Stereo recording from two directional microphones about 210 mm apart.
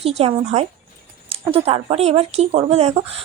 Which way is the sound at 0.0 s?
30° right (ahead or behind).